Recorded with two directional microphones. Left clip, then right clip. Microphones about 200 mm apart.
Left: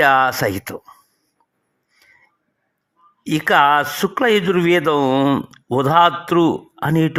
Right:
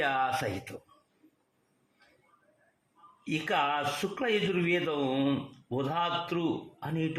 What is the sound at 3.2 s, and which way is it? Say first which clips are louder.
Speech: left 15 dB; 50° left (ahead or behind).